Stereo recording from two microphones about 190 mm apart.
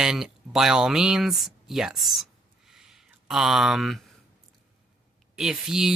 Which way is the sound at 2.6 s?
Centre (ahead or behind).